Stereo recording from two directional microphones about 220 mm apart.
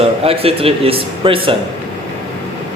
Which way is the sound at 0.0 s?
25° right (ahead or behind).